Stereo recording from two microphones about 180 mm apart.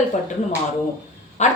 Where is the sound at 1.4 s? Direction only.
40° left (ahead or behind).